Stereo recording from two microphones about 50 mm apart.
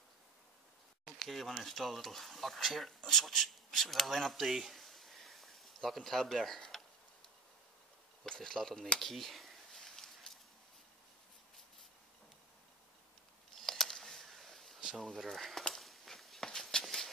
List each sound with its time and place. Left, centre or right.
1.2 s speech: centre
8.3 s speech: centre
9.0 s a sound: centre
13.6 s a sound: centre
16.4 s walk: centre
16.8 s shuffle: centre